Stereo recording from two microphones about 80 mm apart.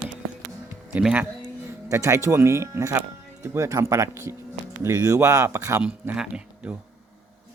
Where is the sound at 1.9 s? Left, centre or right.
Right.